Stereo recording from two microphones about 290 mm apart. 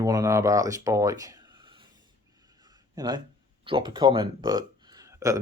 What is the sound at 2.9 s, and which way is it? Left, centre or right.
Speech, centre.